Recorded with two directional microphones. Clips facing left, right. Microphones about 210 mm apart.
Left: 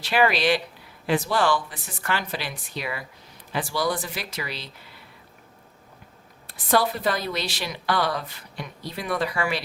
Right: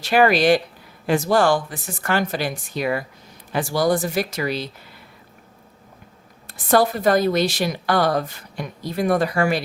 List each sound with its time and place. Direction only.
0.0 s a woman's voice: 45° right (ahead or behind)
6.5 s a woman's voice: 45° right (ahead or behind)